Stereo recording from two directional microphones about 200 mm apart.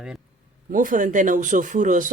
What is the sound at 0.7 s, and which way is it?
Speech, 40° right (ahead or behind).